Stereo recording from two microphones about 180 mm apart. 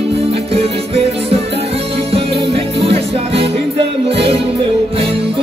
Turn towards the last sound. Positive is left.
turn(degrees=-30)  # may be behind; listen again after turning